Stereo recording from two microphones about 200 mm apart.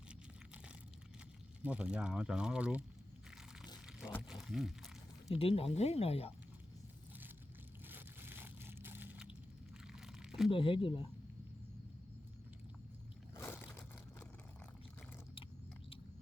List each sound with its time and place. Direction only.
1.6 s speech: 5° right (ahead or behind)
4.2 s speech: centre (ahead or behind)
5.3 s speech: 30° left (ahead or behind)
7.9 s biting: 10° right (ahead or behind)
9.8 s crunch: 5° right (ahead or behind)
10.5 s speech: 25° left (ahead or behind)
13.3 s a sound: 10° left (ahead or behind)